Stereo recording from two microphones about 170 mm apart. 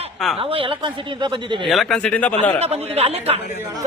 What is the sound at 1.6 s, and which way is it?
Speech, centre (ahead or behind).